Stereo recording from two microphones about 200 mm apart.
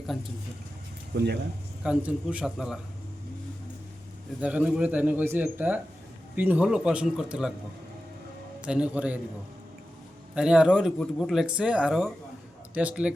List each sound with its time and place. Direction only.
1.1 s speech: 55° right (ahead or behind)
1.8 s speech: 5° right (ahead or behind)
4.4 s speech: 5° right (ahead or behind)
8.6 s speech: 5° right (ahead or behind)
10.3 s speech: 5° right (ahead or behind)